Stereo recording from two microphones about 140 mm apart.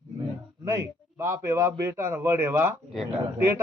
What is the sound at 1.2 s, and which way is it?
A man's voice, 20° right (ahead or behind).